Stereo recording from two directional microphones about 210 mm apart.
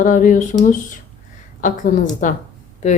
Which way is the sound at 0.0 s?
40° left (ahead or behind).